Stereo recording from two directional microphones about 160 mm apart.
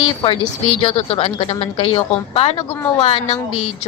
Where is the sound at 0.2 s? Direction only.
35° left (ahead or behind).